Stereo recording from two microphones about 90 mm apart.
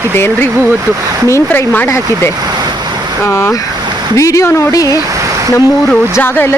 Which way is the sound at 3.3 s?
30° left (ahead or behind).